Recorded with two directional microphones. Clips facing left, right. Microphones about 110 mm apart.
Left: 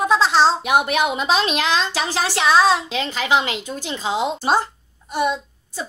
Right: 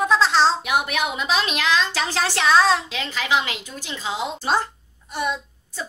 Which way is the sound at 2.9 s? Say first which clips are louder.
Left 4 dB; 25° left (ahead or behind).